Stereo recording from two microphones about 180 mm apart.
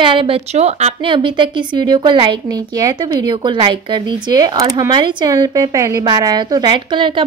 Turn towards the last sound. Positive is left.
turn(degrees=-25)  # may be behind; listen again after turning